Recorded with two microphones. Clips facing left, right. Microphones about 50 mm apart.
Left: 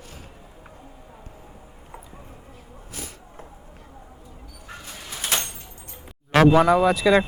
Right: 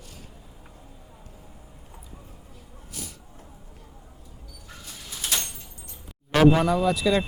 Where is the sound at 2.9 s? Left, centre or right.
Left.